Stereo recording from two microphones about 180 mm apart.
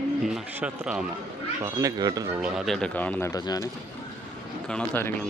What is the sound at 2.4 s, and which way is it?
Speech, 5° right (ahead or behind).